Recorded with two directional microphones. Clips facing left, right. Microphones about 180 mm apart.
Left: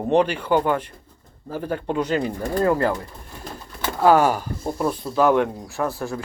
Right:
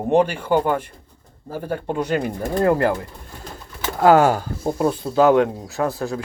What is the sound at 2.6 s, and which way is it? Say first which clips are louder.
Speech: right 2 dB; 55° right (ahead or behind).